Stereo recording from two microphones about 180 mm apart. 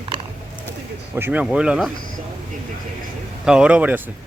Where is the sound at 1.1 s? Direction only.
10° right (ahead or behind).